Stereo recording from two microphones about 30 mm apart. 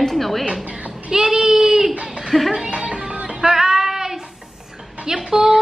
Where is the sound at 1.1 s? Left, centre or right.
Right.